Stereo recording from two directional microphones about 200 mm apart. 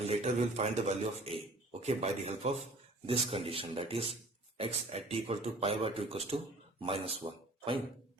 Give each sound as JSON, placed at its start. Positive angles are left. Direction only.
{"t": 0.1, "sound": "speech", "side_deg": -35}